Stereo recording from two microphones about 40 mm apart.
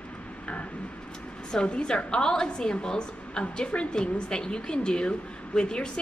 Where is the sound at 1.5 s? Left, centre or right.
Left.